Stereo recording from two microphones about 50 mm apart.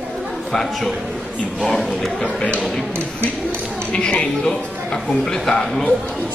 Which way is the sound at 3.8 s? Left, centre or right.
Centre.